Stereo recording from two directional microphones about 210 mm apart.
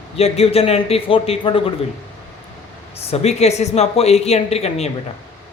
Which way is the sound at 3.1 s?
30° left (ahead or behind).